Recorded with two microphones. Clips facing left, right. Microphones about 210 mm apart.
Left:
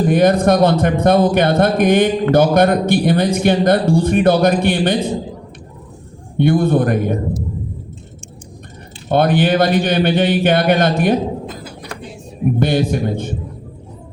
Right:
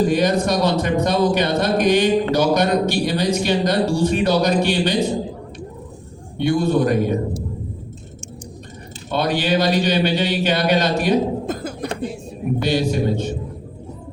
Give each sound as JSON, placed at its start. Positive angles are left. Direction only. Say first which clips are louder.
{"t": 0.1, "sound": "a man's voice", "louder": "left 6 dB", "side_deg": 55}
{"t": 6.3, "sound": "a man's voice", "louder": "left 4 dB", "side_deg": 55}
{"t": 9.0, "sound": "a man's voice", "louder": "left 6 dB", "side_deg": 55}
{"t": 11.4, "sound": "a sound", "louder": "right 6 dB", "side_deg": -50}
{"t": 12.5, "sound": "a man's voice", "louder": "left 2 dB", "side_deg": 50}